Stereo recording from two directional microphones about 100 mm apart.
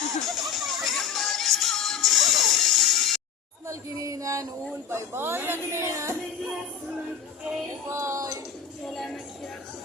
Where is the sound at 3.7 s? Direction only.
35° right (ahead or behind).